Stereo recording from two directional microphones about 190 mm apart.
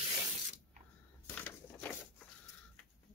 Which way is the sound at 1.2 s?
10° left (ahead or behind).